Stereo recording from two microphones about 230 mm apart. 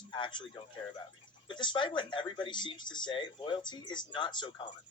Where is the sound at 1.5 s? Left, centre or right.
Left.